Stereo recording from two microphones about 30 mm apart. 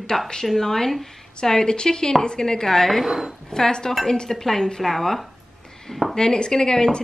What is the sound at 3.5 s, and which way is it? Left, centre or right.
Speech, left.